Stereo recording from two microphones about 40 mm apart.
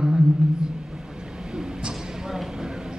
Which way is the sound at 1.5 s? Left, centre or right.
Right.